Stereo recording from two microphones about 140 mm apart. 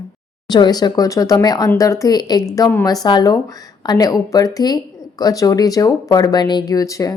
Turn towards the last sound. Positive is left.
turn(degrees=25)  # may be behind; listen again after turning